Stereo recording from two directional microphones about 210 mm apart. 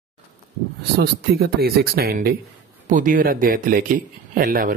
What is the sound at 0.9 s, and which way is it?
A man's voice, 45° right (ahead or behind).